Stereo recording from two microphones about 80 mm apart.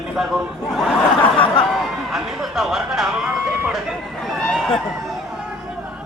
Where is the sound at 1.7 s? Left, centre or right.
Centre.